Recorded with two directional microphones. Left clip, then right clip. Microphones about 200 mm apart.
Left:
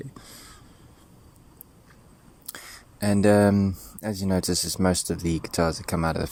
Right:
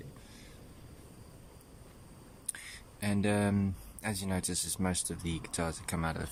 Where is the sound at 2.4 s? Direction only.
30° left (ahead or behind).